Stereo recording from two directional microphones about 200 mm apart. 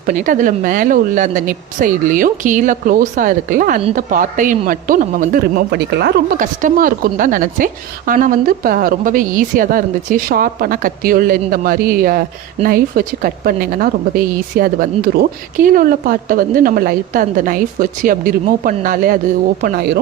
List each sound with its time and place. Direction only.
0.0 s a man's voice: 40° right (ahead or behind)
19.6 s speech: 55° right (ahead or behind)